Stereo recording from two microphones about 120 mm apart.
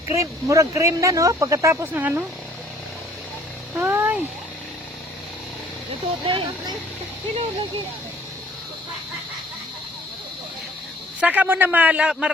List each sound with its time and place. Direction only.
0.1 s speech: 25° right (ahead or behind)
3.8 s a sound: 20° right (ahead or behind)
6.2 s speech: 45° right (ahead or behind)
11.2 s a man's voice: 10° right (ahead or behind)